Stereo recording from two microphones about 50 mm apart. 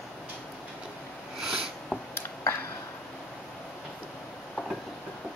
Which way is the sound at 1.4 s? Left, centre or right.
Centre.